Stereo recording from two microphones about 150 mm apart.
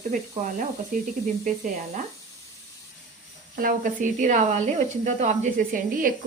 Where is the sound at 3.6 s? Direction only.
65° right (ahead or behind).